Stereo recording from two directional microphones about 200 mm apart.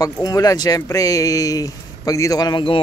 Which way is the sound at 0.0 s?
20° left (ahead or behind).